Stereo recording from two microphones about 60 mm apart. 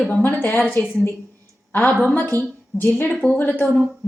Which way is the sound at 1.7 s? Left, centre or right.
Left.